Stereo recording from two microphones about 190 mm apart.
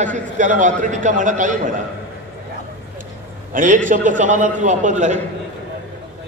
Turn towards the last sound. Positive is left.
turn(degrees=-40)  # may be behind; listen again after turning